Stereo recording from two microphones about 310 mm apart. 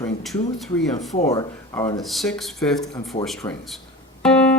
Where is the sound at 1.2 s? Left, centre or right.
Centre.